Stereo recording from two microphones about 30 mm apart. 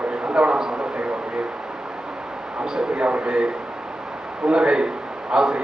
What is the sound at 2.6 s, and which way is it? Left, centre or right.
Speech, right.